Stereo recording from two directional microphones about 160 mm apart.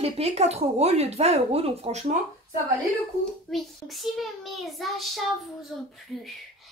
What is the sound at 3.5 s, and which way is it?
Child singing, centre (ahead or behind).